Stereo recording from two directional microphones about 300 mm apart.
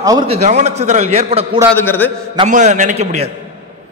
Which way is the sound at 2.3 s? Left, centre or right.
Right.